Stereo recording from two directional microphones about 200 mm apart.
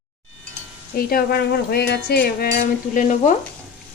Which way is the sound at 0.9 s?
50° left (ahead or behind).